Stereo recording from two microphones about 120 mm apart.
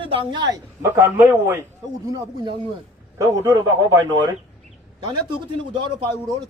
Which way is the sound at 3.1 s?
25° right (ahead or behind).